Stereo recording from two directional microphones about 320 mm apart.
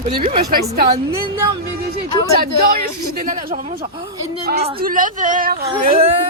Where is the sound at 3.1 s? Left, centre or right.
Right.